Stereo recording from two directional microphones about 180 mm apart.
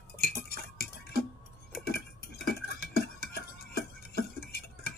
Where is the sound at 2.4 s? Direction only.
60° left (ahead or behind).